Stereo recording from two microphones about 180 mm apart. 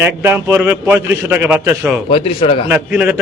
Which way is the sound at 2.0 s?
30° left (ahead or behind).